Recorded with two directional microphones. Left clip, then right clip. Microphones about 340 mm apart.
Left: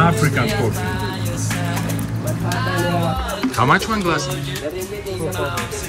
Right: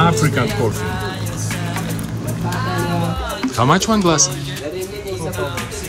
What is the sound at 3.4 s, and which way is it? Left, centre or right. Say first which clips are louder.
Speech: right 1 dB; centre.